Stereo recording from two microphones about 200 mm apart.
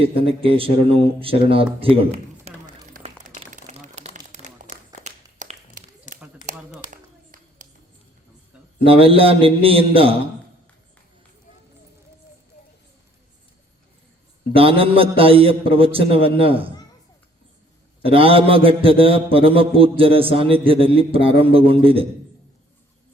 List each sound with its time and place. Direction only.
0.0 s a man's voice: 30° right (ahead or behind)
3.0 s a sound: 30° right (ahead or behind)
6.9 s clapping: 40° right (ahead or behind)
8.8 s a man's voice: 25° right (ahead or behind)
14.5 s a man's voice: 30° right (ahead or behind)
18.0 s a man's voice: 25° right (ahead or behind)